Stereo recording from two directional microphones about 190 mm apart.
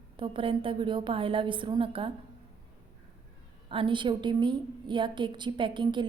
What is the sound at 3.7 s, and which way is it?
A woman's voice, 25° right (ahead or behind).